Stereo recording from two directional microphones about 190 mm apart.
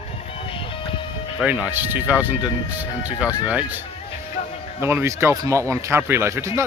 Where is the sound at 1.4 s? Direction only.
10° right (ahead or behind).